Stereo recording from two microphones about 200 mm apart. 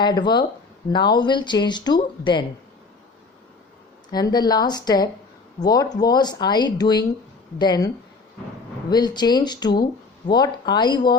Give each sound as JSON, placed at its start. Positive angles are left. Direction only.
{"t": 0.0, "sound": "speech", "side_deg": 20}
{"t": 4.1, "sound": "speech", "side_deg": 20}
{"t": 8.9, "sound": "speech", "side_deg": 20}